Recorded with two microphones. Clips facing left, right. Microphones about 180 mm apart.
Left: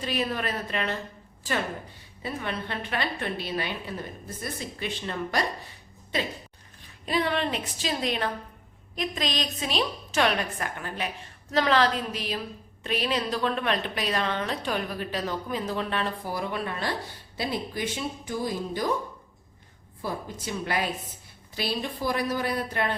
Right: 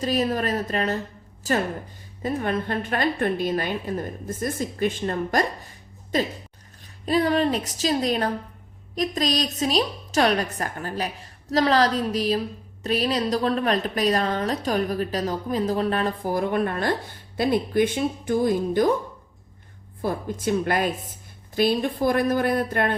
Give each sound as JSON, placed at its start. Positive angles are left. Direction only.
{"t": 0.0, "sound": "a woman's voice", "side_deg": -40}
{"t": 20.0, "sound": "a woman's voice", "side_deg": -50}